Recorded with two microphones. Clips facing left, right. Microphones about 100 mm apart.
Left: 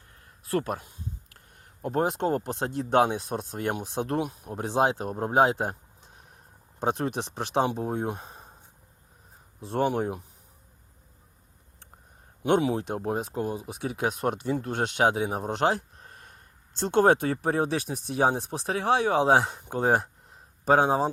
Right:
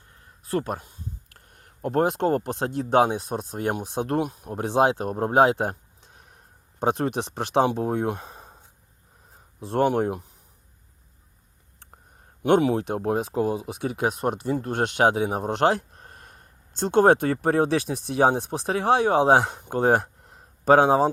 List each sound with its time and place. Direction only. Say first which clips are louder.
0.4 s speech: right 1 dB; 30° right (ahead or behind)
1.3 s speech: right 1 dB; 50° right (ahead or behind)
6.7 s speech: right 4 dB; 55° right (ahead or behind); by 8.5 s 75° right (ahead or behind)
9.6 s speech: right 4 dB; 60° right (ahead or behind)
12.4 s speech: right 4 dB; 55° right (ahead or behind)
14.2 s speech: right 2 dB; 40° right (ahead or behind); by 21.1 s 85° right